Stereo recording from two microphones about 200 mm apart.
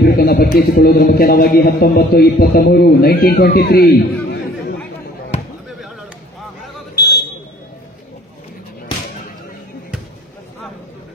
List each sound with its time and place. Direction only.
0.0 s a man's voice: 50° left (ahead or behind)